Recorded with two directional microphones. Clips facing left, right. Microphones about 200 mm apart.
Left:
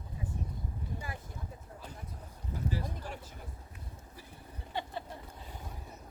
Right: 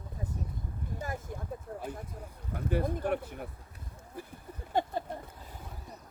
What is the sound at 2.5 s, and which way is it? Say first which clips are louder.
Speech: right 6 dB; 60° right (ahead or behind).